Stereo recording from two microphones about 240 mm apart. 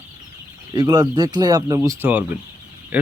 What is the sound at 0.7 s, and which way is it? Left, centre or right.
Speech, centre.